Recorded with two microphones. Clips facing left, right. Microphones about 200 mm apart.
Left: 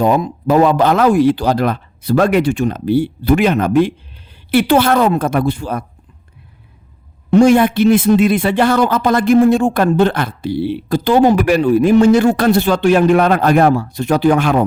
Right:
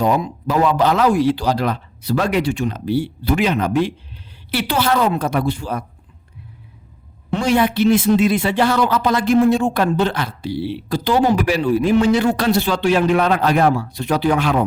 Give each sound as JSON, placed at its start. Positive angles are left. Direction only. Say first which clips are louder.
{"t": 0.0, "sound": "speech", "louder": "left 4 dB", "side_deg": 50}
{"t": 7.3, "sound": "speech", "louder": "left 8 dB", "side_deg": 45}